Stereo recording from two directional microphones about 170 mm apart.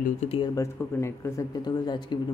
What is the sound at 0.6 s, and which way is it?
Speech, 15° left (ahead or behind).